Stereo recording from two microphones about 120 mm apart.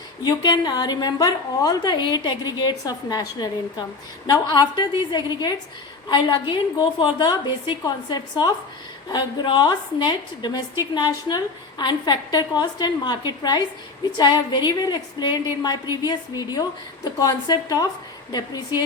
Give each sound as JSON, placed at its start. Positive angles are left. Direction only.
{"t": 0.2, "sound": "a woman's voice", "side_deg": 35}